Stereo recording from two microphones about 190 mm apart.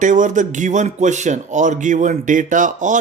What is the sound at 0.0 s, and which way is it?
Speech, 40° right (ahead or behind).